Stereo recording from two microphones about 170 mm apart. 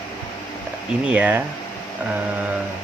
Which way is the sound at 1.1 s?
10° right (ahead or behind).